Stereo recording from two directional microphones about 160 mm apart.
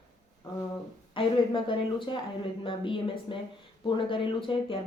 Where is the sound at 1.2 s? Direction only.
30° left (ahead or behind).